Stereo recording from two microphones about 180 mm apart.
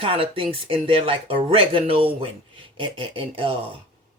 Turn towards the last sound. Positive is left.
turn(degrees=-30)  # may be behind; listen again after turning